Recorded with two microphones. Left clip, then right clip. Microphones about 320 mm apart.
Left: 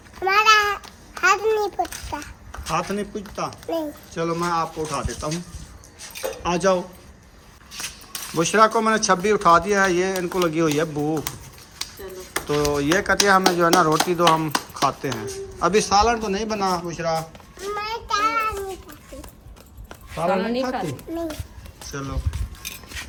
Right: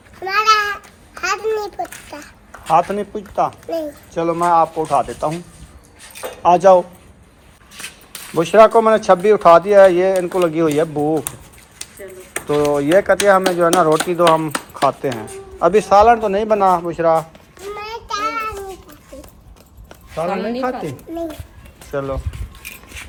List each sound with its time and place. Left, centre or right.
0.2 s babbling: centre
1.8 s a child's voice: left
2.7 s speech: centre
6.4 s speech: centre
8.4 s speech: centre
12.5 s a child's voice: centre